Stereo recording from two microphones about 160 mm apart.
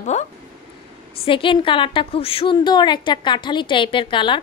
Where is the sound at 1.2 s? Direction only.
30° left (ahead or behind).